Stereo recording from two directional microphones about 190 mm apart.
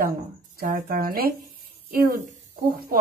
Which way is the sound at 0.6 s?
50° right (ahead or behind).